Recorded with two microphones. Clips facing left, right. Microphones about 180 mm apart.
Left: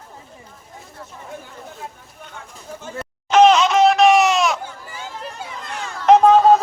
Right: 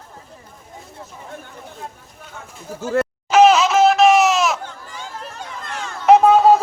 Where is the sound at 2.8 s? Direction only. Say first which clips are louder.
Right 13 dB; 75° right (ahead or behind).